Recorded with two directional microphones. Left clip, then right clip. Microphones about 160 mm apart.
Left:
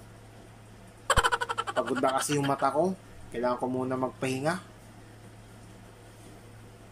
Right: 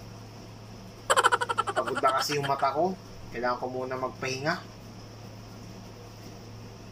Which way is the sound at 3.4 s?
15° left (ahead or behind).